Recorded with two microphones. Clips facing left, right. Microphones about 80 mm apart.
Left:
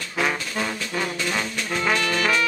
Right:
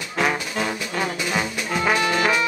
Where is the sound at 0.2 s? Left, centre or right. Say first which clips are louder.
Right 2 dB; centre.